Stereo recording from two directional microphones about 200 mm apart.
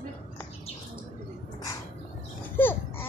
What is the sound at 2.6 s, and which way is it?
Speech, 10° left (ahead or behind).